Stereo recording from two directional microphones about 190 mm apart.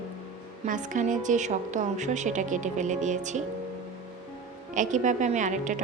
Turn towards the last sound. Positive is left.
turn(degrees=-40)  # may be behind; listen again after turning